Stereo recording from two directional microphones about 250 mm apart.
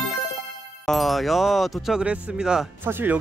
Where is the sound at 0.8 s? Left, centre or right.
Centre.